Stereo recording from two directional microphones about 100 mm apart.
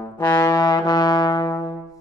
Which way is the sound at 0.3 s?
40° left (ahead or behind).